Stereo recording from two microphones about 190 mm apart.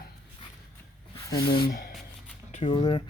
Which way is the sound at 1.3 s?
20° left (ahead or behind).